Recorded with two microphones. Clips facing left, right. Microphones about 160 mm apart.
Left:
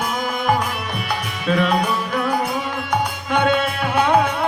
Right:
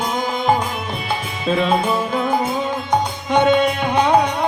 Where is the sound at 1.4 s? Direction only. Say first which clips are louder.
Right 1 dB; 25° right (ahead or behind).